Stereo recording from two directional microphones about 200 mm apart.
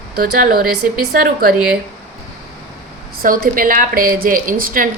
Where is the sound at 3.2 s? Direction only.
45° right (ahead or behind).